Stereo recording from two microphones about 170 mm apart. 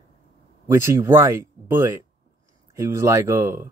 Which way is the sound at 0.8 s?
15° right (ahead or behind).